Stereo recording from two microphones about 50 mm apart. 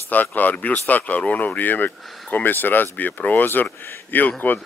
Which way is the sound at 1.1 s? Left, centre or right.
Left.